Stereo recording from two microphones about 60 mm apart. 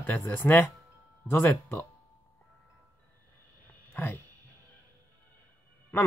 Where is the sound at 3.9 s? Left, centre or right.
Left.